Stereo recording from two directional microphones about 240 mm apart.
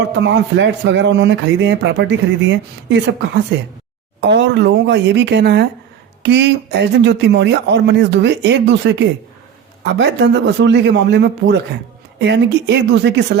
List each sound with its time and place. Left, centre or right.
0.2 s speech: right